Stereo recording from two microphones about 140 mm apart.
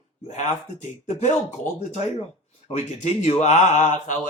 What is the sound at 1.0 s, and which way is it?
Speech, 60° left (ahead or behind).